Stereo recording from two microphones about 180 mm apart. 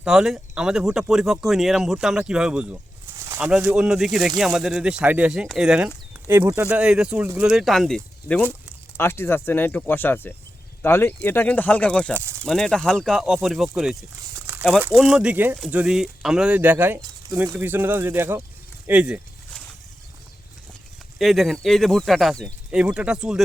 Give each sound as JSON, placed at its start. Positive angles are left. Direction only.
{"t": 0.0, "sound": "speech", "side_deg": -5}
{"t": 3.2, "sound": "bird", "side_deg": -15}
{"t": 3.5, "sound": "speech", "side_deg": -10}
{"t": 12.1, "sound": "speech", "side_deg": -15}
{"t": 12.5, "sound": "speech", "side_deg": 5}
{"t": 14.3, "sound": "crumpling", "side_deg": -15}
{"t": 14.8, "sound": "speech", "side_deg": -5}
{"t": 21.2, "sound": "speech", "side_deg": 0}